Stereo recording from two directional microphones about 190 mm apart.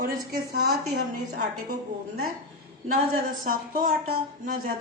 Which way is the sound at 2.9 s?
50° right (ahead or behind).